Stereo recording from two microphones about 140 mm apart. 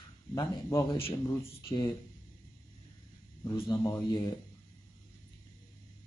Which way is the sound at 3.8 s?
25° left (ahead or behind).